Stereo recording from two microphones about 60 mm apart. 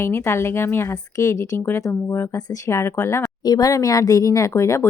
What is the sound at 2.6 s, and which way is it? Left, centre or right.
Speech, left.